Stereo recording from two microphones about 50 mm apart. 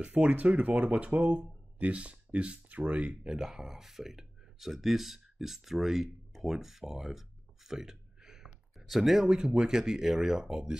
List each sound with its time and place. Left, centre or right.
0.2 s speech: right
3.3 s speech: centre
8.7 s speech: centre